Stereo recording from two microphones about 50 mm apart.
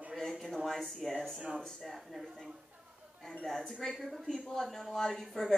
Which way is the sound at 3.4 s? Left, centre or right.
Centre.